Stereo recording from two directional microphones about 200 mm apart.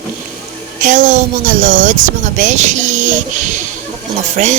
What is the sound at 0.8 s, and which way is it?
Speech, 40° right (ahead or behind).